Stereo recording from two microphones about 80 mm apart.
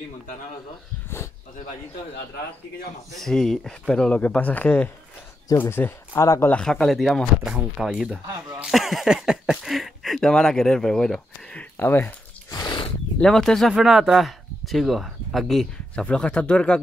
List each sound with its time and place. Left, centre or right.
3.1 s speech: centre; by 6.2 s left
6.5 s speech: centre
7.4 s speech: centre
11.7 s speech: left
12.4 s a sound: left
13.2 s speech: centre
15.9 s speech: centre